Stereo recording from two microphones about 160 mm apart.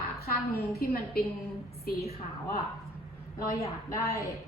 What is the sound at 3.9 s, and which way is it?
Speech, 20° left (ahead or behind).